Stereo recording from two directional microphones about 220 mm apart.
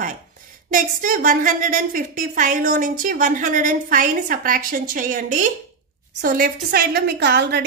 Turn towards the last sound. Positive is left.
turn(degrees=-50)  # may be behind; listen again after turning